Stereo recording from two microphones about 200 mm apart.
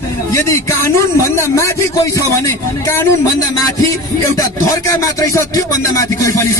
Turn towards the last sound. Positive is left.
turn(degrees=15)  # may be behind; listen again after turning